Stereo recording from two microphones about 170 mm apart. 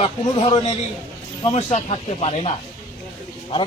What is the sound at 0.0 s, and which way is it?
Speech, 30° left (ahead or behind).